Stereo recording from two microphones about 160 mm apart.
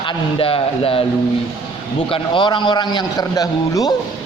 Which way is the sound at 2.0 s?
35° left (ahead or behind).